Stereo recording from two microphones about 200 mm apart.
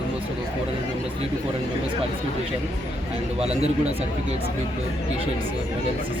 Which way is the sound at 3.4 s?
30° right (ahead or behind).